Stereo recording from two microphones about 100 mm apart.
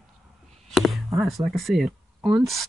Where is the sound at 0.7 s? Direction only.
Centre (ahead or behind).